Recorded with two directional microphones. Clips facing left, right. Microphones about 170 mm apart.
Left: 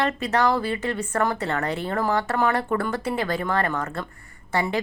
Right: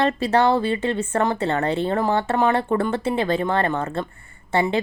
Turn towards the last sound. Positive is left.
turn(degrees=-25)  # may be behind; listen again after turning